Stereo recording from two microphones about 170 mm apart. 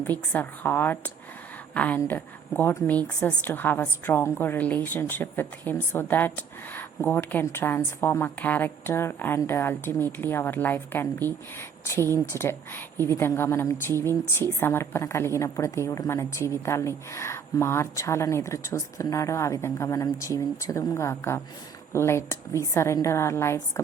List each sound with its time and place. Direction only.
0.0 s a woman's voice: 10° left (ahead or behind)
12.3 s a woman's voice: 15° left (ahead or behind)